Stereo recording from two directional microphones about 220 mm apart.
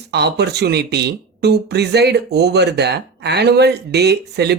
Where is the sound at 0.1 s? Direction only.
50° right (ahead or behind).